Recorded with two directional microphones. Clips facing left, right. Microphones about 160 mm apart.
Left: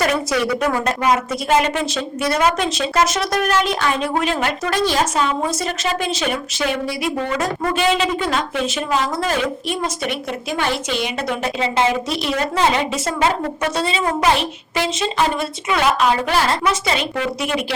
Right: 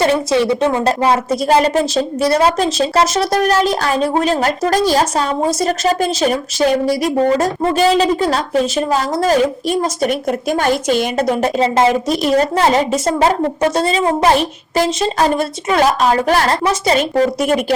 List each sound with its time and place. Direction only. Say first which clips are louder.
0.0 s a woman's voice: right 5 dB; 25° right (ahead or behind)
14.0 s a woman's voice: right 4 dB; 30° right (ahead or behind)